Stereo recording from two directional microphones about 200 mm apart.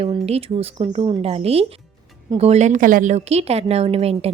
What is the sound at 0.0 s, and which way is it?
A woman's voice, 30° right (ahead or behind).